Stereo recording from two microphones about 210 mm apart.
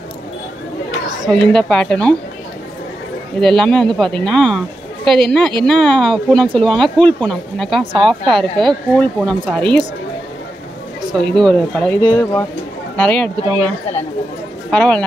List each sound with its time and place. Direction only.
1.3 s speech: 5° left (ahead or behind)
3.3 s speech: 5° left (ahead or behind)
11.1 s speech: 5° left (ahead or behind)
12.0 s speech: 20° left (ahead or behind)
12.9 s speech: 5° left (ahead or behind)
14.7 s speech: 5° left (ahead or behind)